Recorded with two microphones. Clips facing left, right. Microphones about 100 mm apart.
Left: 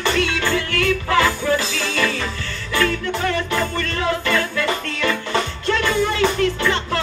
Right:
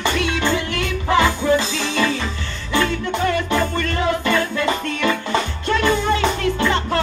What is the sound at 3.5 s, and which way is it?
Music, 25° right (ahead or behind).